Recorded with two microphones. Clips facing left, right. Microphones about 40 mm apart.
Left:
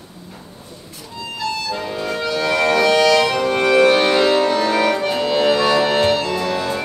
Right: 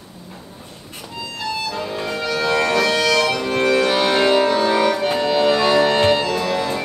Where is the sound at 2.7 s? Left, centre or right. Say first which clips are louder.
Left 3 dB; centre.